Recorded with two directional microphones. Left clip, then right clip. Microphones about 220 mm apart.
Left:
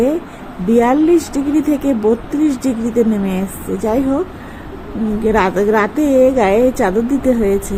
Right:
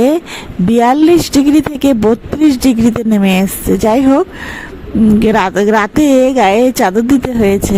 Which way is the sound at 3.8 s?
45° right (ahead or behind).